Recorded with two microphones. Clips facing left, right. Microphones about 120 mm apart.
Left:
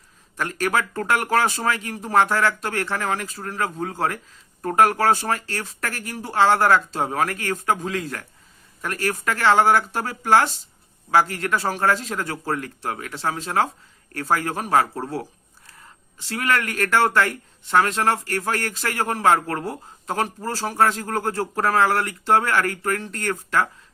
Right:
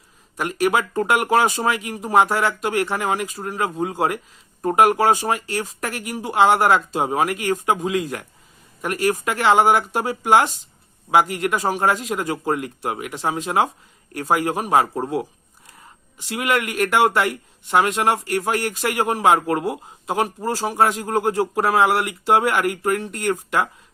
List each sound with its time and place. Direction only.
0.3 s speech: 15° right (ahead or behind)